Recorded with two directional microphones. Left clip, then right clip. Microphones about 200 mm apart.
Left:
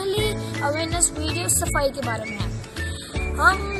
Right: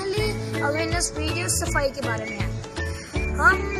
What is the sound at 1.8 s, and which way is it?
Speech, 20° right (ahead or behind).